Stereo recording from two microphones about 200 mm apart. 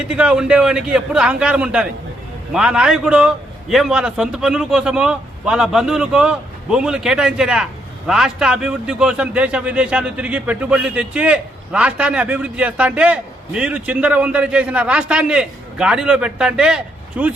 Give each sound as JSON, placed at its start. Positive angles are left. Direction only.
{"t": 0.1, "sound": "a man's voice", "side_deg": -5}